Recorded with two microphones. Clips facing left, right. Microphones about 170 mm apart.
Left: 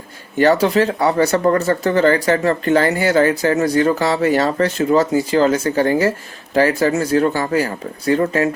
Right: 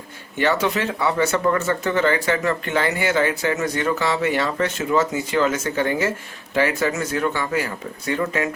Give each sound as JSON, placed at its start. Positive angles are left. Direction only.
{"t": 0.3, "sound": "speech", "side_deg": 40}